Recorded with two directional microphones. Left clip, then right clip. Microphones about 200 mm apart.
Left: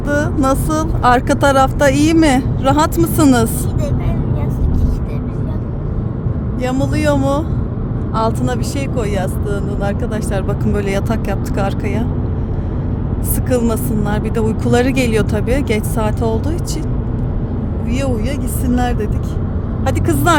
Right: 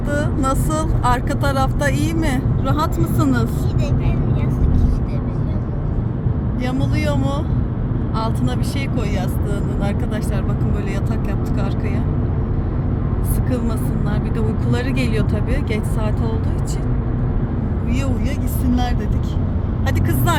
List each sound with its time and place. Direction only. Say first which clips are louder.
0.1 s speech: left 6 dB; 30° left (ahead or behind); by 3.4 s 55° left (ahead or behind)
6.6 s speech: left 6 dB; 45° left (ahead or behind)
10.3 s speech: left 6 dB; 55° left (ahead or behind)
13.5 s speech: left 9 dB; 55° left (ahead or behind)
18.7 s speech: left 5 dB; 50° left (ahead or behind)